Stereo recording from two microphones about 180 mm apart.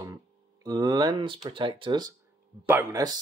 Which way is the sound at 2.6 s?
15° right (ahead or behind).